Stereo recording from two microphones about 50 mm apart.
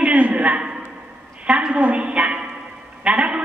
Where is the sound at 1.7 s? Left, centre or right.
Right.